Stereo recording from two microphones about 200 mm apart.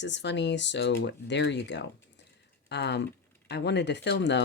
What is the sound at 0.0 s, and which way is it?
Speech, 60° left (ahead or behind).